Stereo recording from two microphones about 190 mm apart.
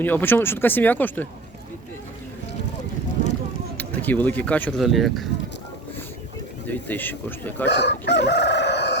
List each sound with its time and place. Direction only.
0.0 s speech: 10° left (ahead or behind)
3.8 s speech: 10° left (ahead or behind)
6.7 s speech: 10° left (ahead or behind)
7.7 s chicken: 65° left (ahead or behind)